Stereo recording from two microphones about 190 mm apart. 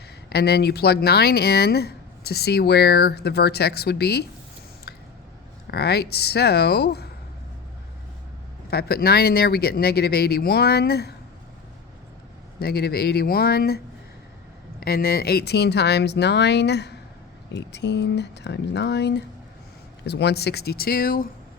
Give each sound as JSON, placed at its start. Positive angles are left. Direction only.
{"t": 0.3, "sound": "speech", "side_deg": 60}
{"t": 5.6, "sound": "speech", "side_deg": 60}
{"t": 8.7, "sound": "speech", "side_deg": 55}
{"t": 12.5, "sound": "speech", "side_deg": 55}